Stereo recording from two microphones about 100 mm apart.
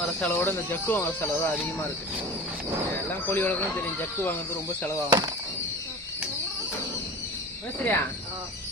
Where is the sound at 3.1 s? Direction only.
20° left (ahead or behind).